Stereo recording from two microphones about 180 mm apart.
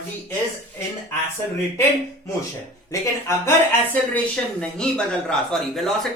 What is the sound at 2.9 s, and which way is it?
Speech, 15° left (ahead or behind).